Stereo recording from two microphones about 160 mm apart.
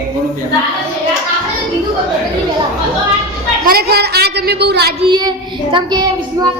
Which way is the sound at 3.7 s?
75° right (ahead or behind).